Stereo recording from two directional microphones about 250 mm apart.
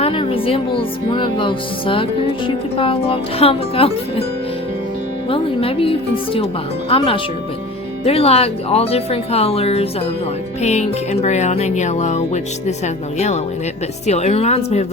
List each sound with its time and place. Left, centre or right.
0.0 s speech: left
5.3 s speech: left